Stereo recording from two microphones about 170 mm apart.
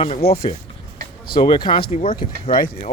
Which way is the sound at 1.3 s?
25° left (ahead or behind).